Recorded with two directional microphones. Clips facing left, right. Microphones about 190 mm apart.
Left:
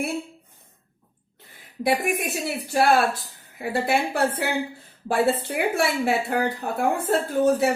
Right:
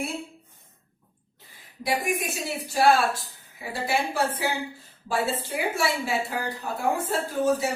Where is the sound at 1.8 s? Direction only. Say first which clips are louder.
Left 4 dB; 55° left (ahead or behind).